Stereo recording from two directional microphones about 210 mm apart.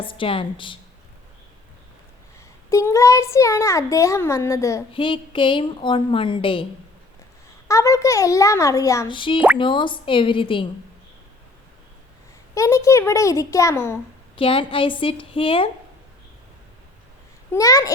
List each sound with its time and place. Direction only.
0.0 s a woman's voice: 25° left (ahead or behind)
2.6 s a child's voice: 15° left (ahead or behind)
7.7 s a child's voice: 15° left (ahead or behind)
12.5 s a child's voice: 15° left (ahead or behind)
14.3 s a woman's voice: 25° left (ahead or behind)
17.5 s a child's voice: 15° left (ahead or behind)